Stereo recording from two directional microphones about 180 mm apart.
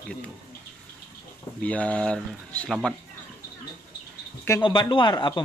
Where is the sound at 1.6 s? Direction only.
10° left (ahead or behind).